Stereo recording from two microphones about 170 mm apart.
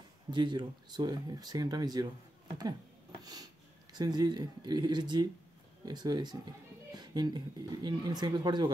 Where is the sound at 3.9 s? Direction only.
25° right (ahead or behind).